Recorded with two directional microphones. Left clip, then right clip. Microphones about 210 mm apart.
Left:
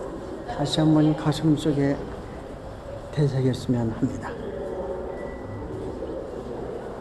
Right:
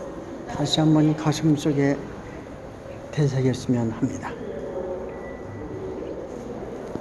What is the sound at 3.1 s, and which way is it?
Speech, 10° right (ahead or behind).